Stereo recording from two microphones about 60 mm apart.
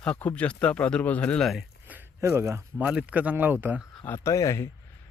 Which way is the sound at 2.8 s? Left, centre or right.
Centre.